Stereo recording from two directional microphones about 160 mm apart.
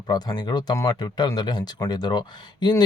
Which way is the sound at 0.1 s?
25° left (ahead or behind).